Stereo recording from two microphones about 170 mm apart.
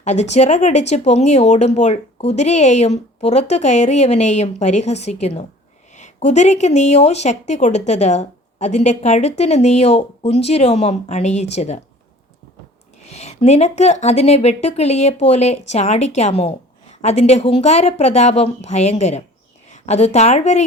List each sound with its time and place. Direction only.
0.0 s speech: 45° left (ahead or behind)
13.1 s speech: 40° left (ahead or behind)